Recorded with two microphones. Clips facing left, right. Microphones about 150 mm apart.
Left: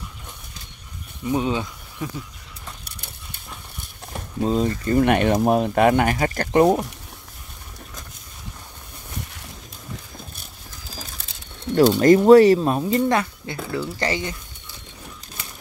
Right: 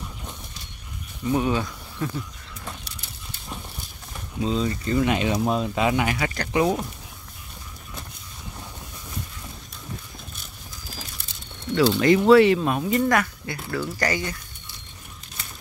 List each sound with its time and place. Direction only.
1.2 s speech: 20° left (ahead or behind)
4.1 s speech: 50° left (ahead or behind)
11.7 s speech: 45° left (ahead or behind); by 14.3 s 25° left (ahead or behind)